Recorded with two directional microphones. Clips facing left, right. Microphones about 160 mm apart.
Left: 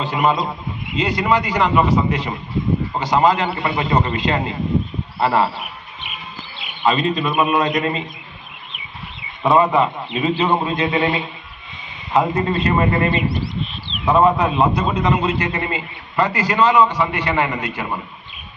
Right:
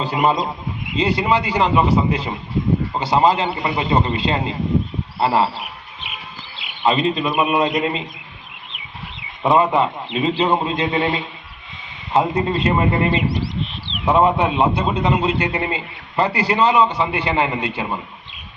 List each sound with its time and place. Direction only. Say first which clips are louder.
0.0 s a man's voice: even; 35° right (ahead or behind)
6.8 s a man's voice: even; 25° right (ahead or behind)
9.4 s a man's voice: left 1 dB; 20° right (ahead or behind)
12.1 s a man's voice: even; 20° right (ahead or behind)
13.3 s speech: even; 80° right
14.2 s a man's voice: left 1 dB; 25° right (ahead or behind)